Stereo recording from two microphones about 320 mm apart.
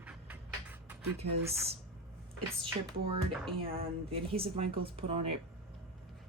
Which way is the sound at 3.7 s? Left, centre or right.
Right.